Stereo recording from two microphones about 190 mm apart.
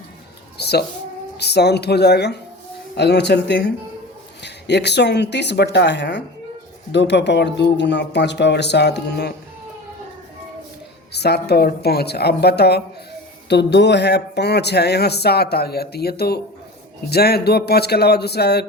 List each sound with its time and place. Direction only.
0.5 s a sound: 60° left (ahead or behind)
1.4 s speech: 60° left (ahead or behind)
11.1 s speech: 60° left (ahead or behind)